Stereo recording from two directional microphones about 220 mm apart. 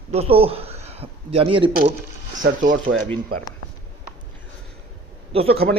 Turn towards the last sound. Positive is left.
turn(degrees=-25)  # may be behind; listen again after turning